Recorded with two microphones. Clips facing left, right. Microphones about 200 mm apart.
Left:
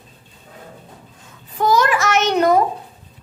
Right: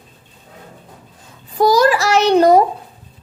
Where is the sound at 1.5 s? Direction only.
35° right (ahead or behind).